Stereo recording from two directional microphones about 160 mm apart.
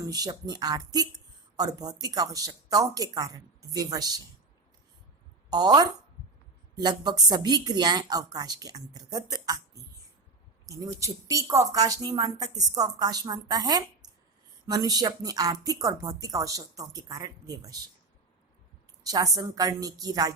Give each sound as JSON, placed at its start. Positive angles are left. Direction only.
{"t": 0.1, "sound": "speech", "side_deg": -25}
{"t": 5.5, "sound": "speech", "side_deg": -25}
{"t": 11.0, "sound": "speech", "side_deg": -20}
{"t": 14.0, "sound": "a sound", "side_deg": -25}
{"t": 14.7, "sound": "speech", "side_deg": -25}
{"t": 19.0, "sound": "speech", "side_deg": -20}